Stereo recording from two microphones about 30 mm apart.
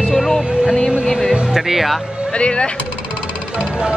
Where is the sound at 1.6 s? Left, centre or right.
Centre.